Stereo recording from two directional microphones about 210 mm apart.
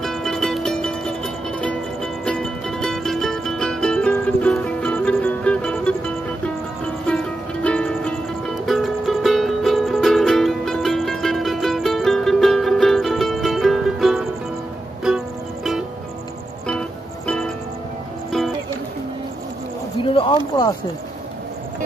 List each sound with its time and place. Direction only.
0.0 s music: centre (ahead or behind)
7.6 s music: 5° left (ahead or behind)
20.0 s a sound: 25° left (ahead or behind)